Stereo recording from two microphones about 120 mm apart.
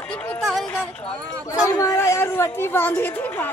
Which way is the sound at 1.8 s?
25° left (ahead or behind).